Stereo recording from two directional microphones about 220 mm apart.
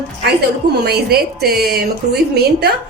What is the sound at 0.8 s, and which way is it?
A woman's voice, 45° right (ahead or behind).